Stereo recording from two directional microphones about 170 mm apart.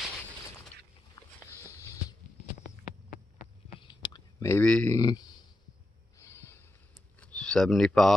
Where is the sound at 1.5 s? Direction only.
15° left (ahead or behind).